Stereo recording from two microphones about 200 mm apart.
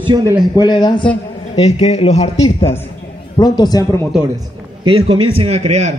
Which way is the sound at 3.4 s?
20° left (ahead or behind).